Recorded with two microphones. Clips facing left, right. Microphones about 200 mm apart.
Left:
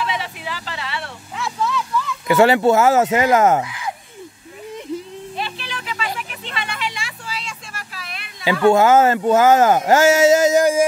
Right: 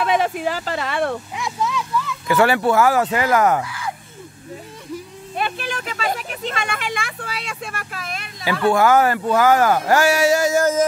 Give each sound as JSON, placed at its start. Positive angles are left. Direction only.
{"t": 0.0, "sound": "speech", "side_deg": -50}
{"t": 1.3, "sound": "speech", "side_deg": -15}
{"t": 2.2, "sound": "speech", "side_deg": 20}
{"t": 5.4, "sound": "a sound", "side_deg": -50}
{"t": 8.5, "sound": "speech", "side_deg": 20}